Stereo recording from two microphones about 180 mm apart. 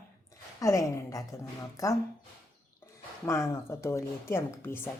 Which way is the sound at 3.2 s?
15° left (ahead or behind).